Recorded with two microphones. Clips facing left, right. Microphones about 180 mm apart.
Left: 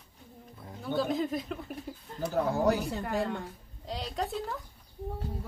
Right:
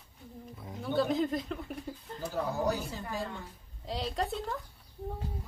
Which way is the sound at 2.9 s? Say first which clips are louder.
Left 6 dB; 65° left (ahead or behind).